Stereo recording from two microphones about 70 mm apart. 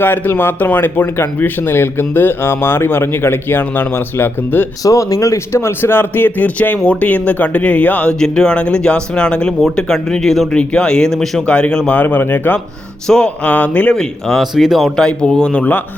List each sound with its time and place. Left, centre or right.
0.0 s speech: left
4.8 s speech: left; by 10.6 s centre
10.6 s speech: centre
11.9 s speech: left
13.1 s speech: centre
13.9 s speech: centre
14.5 s speech: centre
14.9 s speech: centre